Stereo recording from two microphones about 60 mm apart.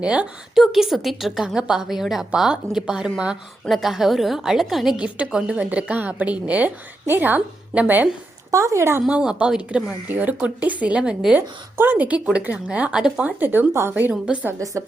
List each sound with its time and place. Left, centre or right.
0.0 s a woman's voice: centre
0.5 s a woman's voice: centre
4.9 s a woman's voice: centre
8.4 s speech: right
9.0 s a woman's voice: centre
10.1 s a woman's voice: right
11.3 s a woman's voice: right
12.9 s a woman's voice: centre
13.4 s speech: right
14.6 s speech: right